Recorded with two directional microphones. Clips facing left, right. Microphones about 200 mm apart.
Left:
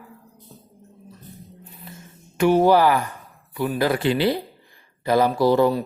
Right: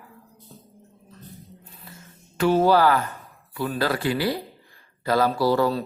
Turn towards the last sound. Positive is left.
turn(degrees=15)  # may be behind; listen again after turning